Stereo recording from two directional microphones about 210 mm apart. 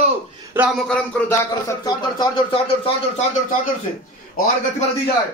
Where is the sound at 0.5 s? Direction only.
10° right (ahead or behind).